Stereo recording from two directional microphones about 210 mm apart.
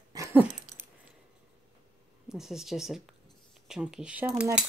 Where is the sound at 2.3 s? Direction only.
Centre (ahead or behind).